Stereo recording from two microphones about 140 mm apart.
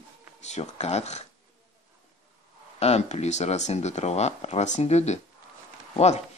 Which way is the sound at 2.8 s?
50° left (ahead or behind).